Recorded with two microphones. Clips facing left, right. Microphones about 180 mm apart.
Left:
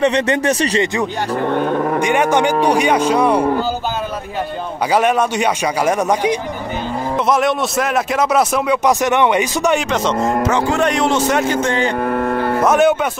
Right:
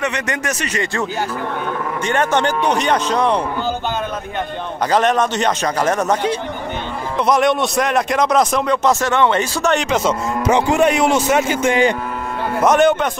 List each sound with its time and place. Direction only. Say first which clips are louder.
0.0 s speech: left 7 dB; 30° left (ahead or behind)
2.0 s speech: left 1 dB; 15° left (ahead or behind)
4.9 s speech: left 1 dB; 10° left (ahead or behind)
7.2 s speech: right 2 dB; centre (ahead or behind)
9.8 s a man's voice: left 1 dB; centre (ahead or behind)
12.1 s cattle: left 8 dB; 55° left (ahead or behind)
12.6 s a man's voice: right 1 dB; 5° left (ahead or behind)